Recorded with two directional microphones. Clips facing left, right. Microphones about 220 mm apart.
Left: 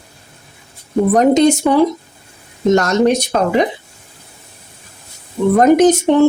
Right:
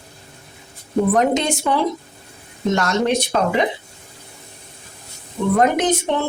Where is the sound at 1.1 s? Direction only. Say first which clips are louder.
Left 7 dB; 40° left (ahead or behind).